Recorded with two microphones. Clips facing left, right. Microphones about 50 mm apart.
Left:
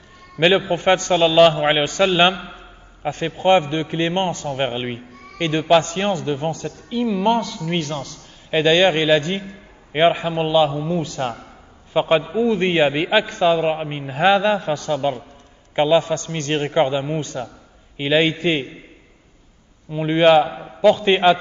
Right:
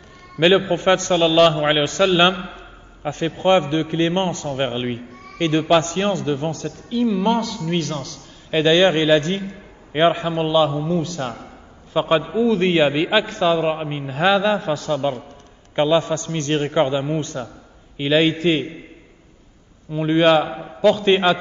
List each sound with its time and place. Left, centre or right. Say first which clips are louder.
0.4 s a man's voice: right 1 dB; centre
2.5 s a sound: right 1 dB; left
3.3 s a man's voice: left 1 dB; centre
4.6 s a man's voice: even; centre
16.7 s a man's voice: left 2 dB; centre
19.9 s a man's voice: left 1 dB; centre
20.4 s a man's voice: right 1 dB; centre
20.8 s a man's voice: left 1 dB; centre